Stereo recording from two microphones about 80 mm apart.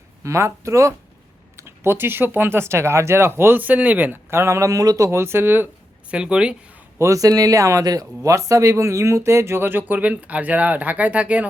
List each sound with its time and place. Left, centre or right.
0.2 s speech: right
6.1 s speech: centre
7.0 s speech: right; by 11.4 s centre